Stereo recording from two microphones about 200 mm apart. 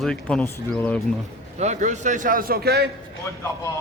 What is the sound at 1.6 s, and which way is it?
A man's voice, 35° right (ahead or behind).